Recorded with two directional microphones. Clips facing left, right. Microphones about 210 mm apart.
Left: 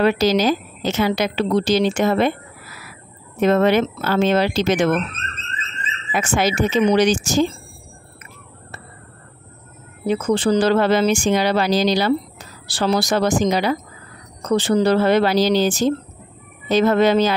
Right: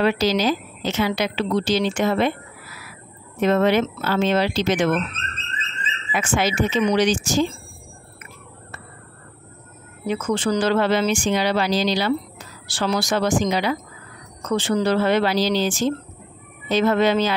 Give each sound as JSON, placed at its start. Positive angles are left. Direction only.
{"t": 0.0, "sound": "a woman's voice", "side_deg": 45}
{"t": 3.3, "sound": "a woman's voice", "side_deg": 45}
{"t": 6.1, "sound": "a woman's voice", "side_deg": 40}
{"t": 10.0, "sound": "a woman's voice", "side_deg": 35}